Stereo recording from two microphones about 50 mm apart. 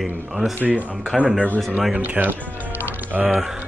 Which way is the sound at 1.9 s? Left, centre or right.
Right.